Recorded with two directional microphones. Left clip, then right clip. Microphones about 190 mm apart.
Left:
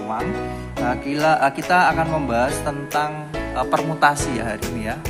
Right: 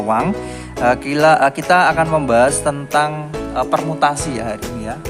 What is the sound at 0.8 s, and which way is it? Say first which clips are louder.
Speech: right 7 dB; 35° right (ahead or behind).